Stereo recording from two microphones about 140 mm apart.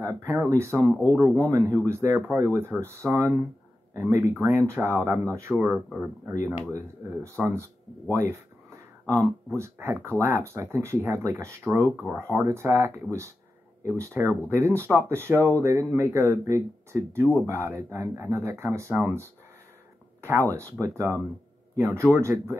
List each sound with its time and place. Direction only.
0.0 s speech: 20° right (ahead or behind)
0.8 s speech: 10° left (ahead or behind)
1.4 s speech: 20° right (ahead or behind)
5.6 s speech: 5° right (ahead or behind)
7.3 s speech: 20° right (ahead or behind)
9.6 s speech: 15° right (ahead or behind)
20.2 s a sound: 20° right (ahead or behind)
20.8 s speech: 20° right (ahead or behind)